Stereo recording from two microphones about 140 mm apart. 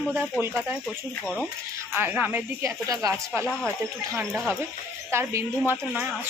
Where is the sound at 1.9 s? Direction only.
15° right (ahead or behind).